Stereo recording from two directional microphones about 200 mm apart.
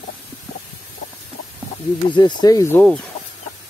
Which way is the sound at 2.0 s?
20° left (ahead or behind).